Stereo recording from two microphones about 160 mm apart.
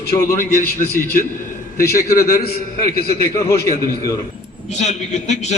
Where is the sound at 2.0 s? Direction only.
60° left (ahead or behind).